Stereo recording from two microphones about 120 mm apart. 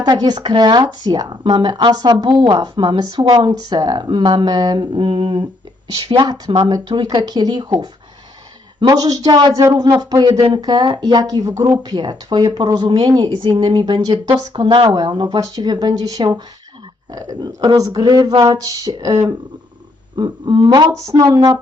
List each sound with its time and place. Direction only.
0.0 s speech: 35° right (ahead or behind)
8.9 s speech: 30° right (ahead or behind)
20.1 s speech: 40° right (ahead or behind)
20.7 s speech: 25° right (ahead or behind)